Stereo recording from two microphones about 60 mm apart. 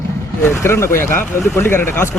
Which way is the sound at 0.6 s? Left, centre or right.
Left.